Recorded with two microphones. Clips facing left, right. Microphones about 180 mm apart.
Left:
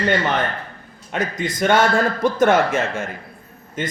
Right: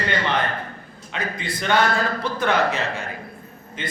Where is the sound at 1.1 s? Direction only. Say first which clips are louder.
Left 5 dB; 45° left (ahead or behind).